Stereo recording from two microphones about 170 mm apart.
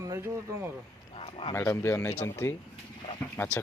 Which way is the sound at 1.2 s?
35° left (ahead or behind).